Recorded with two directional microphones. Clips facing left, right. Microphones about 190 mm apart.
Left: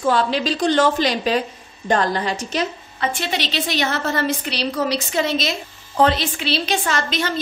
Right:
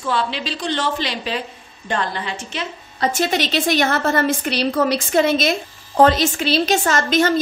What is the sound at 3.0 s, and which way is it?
A woman's voice, 45° right (ahead or behind).